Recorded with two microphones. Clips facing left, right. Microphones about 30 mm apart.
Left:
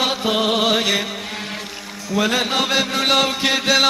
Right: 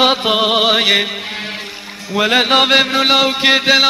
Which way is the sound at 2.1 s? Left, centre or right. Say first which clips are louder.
Right 5 dB; right.